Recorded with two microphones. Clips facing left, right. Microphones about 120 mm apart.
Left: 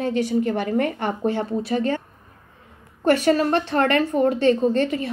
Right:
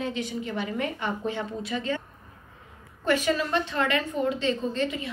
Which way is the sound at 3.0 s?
45° left (ahead or behind).